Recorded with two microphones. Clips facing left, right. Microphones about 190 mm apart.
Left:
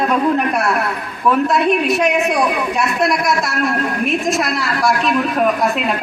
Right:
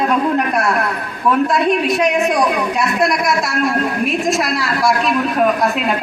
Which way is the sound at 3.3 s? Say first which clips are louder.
Right 1 dB; centre (ahead or behind).